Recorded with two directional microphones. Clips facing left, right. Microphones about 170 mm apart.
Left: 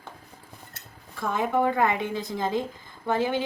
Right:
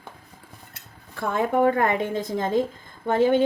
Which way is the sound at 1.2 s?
55° right (ahead or behind).